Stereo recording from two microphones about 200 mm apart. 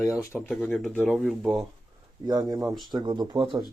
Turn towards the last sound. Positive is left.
turn(degrees=-25)  # may be behind; listen again after turning